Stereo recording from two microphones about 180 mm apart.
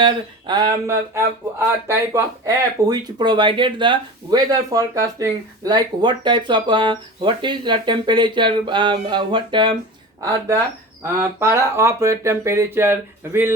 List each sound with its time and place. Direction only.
0.0 s speech: 25° right (ahead or behind)
11.0 s speech: 15° right (ahead or behind)